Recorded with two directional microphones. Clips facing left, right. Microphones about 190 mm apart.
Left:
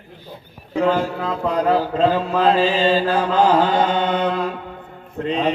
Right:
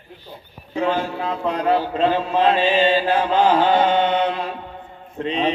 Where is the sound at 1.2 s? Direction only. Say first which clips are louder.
Left 1 dB; 40° left (ahead or behind).